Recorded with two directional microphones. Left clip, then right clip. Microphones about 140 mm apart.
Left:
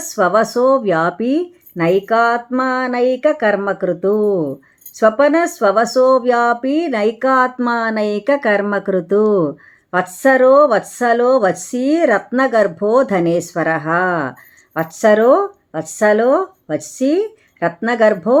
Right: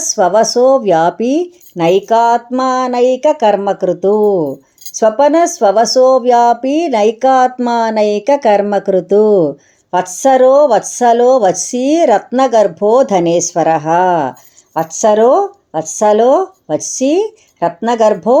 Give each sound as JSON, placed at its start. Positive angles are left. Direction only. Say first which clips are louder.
{"t": 0.1, "sound": "speech", "louder": "right 4 dB", "side_deg": -10}